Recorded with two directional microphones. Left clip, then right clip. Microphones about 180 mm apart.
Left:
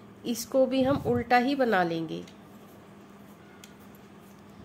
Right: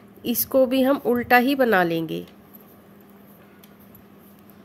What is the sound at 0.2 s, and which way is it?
Speech, 45° right (ahead or behind).